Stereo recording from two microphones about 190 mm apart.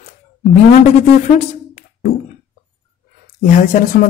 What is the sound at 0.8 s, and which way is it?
Speech, 35° left (ahead or behind).